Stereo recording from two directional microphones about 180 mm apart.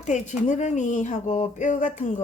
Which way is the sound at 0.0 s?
40° left (ahead or behind).